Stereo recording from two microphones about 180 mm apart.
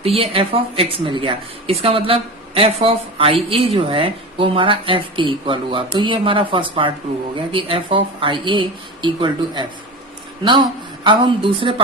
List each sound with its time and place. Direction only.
0.0 s speech: 30° right (ahead or behind)
11.0 s speech: 25° right (ahead or behind)